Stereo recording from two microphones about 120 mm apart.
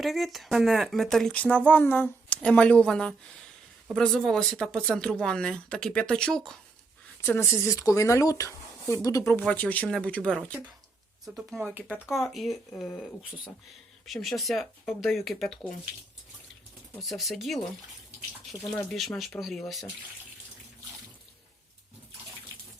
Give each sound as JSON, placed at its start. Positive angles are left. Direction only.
{"t": 0.0, "sound": "speech", "side_deg": 0}
{"t": 7.2, "sound": "speech", "side_deg": 20}
{"t": 9.5, "sound": "speech", "side_deg": 10}
{"t": 11.3, "sound": "speech", "side_deg": 0}
{"t": 14.0, "sound": "speech", "side_deg": 0}
{"t": 17.0, "sound": "speech", "side_deg": 0}
{"t": 18.7, "sound": "speech", "side_deg": 0}